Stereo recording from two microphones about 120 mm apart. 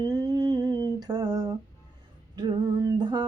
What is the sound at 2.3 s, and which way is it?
Male singing, 40° right (ahead or behind).